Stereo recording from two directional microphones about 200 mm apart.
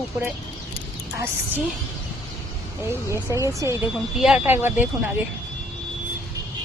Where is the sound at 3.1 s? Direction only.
15° right (ahead or behind).